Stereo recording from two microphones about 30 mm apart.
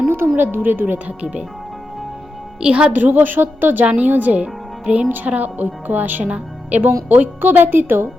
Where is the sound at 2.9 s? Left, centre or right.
Right.